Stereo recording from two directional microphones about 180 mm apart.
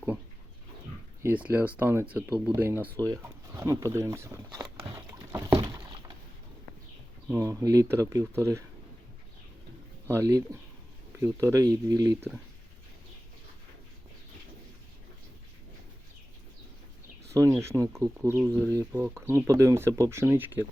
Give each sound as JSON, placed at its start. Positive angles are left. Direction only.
{"t": 1.2, "sound": "speech", "side_deg": -10}
{"t": 3.0, "sound": "a sound", "side_deg": -15}
{"t": 7.3, "sound": "speech", "side_deg": -15}
{"t": 10.1, "sound": "speech", "side_deg": -15}
{"t": 17.3, "sound": "speech", "side_deg": -15}